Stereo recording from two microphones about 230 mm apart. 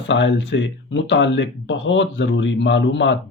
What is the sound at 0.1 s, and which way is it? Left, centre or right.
Speech, left.